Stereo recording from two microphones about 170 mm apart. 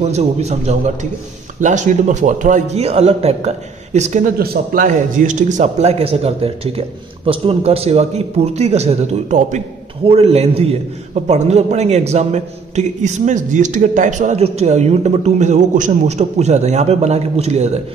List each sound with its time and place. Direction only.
0.0 s a man's voice: 40° right (ahead or behind)
4.4 s a man's voice: 55° right (ahead or behind)